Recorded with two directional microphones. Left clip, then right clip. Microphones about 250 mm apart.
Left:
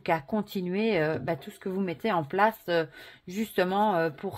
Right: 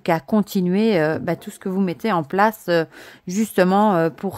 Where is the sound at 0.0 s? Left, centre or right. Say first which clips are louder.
Right 8 dB; right.